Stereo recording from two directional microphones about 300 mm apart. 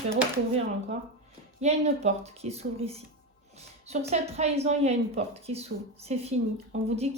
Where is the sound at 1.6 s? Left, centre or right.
Right.